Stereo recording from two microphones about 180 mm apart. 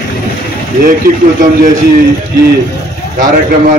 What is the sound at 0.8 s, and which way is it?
Speech, 50° right (ahead or behind).